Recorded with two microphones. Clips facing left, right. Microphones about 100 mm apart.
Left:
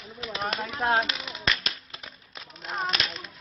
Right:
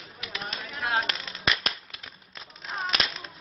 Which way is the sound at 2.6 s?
Centre (ahead or behind).